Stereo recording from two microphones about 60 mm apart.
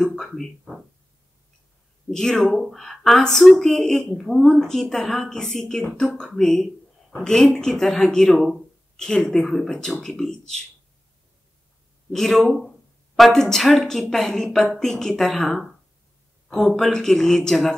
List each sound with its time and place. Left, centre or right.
0.0 s a woman's voice: centre
2.0 s a woman's voice: centre
12.1 s speech: centre